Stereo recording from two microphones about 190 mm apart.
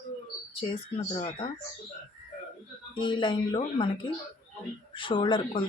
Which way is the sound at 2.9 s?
25° left (ahead or behind).